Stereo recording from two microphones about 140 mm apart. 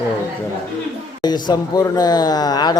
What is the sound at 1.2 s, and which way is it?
Speech, 30° left (ahead or behind).